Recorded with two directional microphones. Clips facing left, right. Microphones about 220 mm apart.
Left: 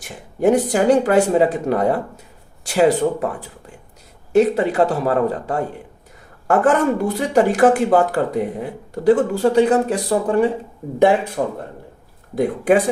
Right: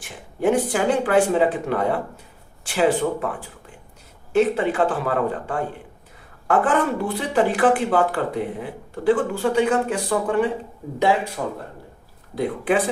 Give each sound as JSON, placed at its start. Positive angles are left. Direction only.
{"t": 0.0, "sound": "speech", "side_deg": 40}
{"t": 4.3, "sound": "speech", "side_deg": 40}